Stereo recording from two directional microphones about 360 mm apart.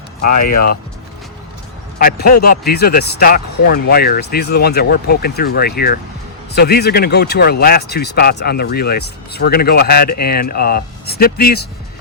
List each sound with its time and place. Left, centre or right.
0.2 s speech: left
2.0 s speech: left